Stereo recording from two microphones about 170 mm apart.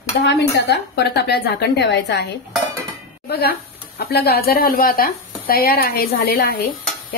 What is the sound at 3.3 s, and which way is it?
Speech, 70° left (ahead or behind).